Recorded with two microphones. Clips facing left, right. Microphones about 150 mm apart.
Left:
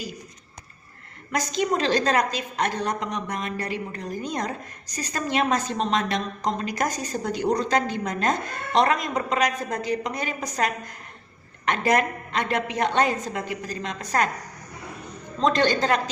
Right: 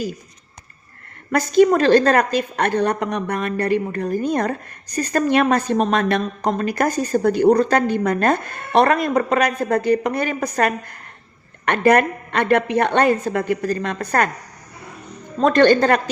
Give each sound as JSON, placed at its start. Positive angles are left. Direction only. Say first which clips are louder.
{"t": 1.3, "sound": "a woman's voice", "louder": "right 10 dB", "side_deg": -55}
{"t": 15.4, "sound": "a woman's voice", "louder": "right 8 dB", "side_deg": -55}